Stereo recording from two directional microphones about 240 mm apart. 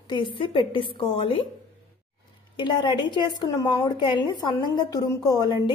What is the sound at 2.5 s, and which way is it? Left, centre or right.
A woman's voice, centre.